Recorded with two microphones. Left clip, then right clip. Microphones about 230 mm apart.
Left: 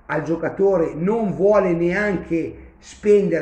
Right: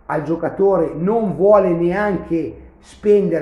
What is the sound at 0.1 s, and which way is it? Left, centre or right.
Speech, centre.